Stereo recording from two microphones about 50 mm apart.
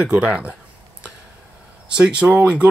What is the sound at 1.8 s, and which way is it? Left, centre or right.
Speech, right.